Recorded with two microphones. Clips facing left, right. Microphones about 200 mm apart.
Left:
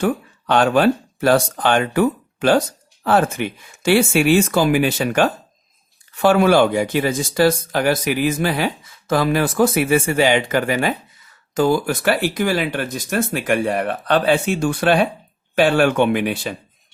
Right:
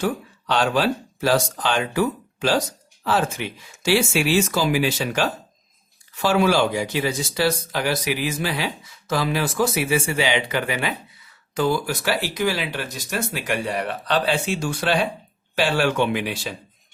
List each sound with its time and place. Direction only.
0.0 s speech: 55° left (ahead or behind)